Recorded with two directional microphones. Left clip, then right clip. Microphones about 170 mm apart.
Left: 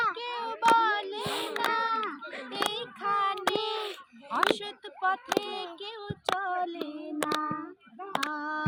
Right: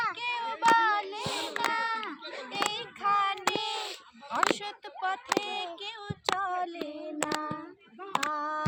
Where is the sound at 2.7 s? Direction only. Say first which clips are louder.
Right 4 dB; 15° right (ahead or behind).